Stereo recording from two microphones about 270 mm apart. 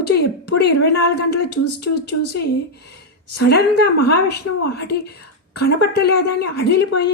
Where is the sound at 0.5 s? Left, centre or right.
Left.